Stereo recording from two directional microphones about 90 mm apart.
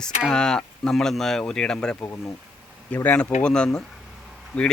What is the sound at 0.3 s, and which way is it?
Speech, 5° left (ahead or behind).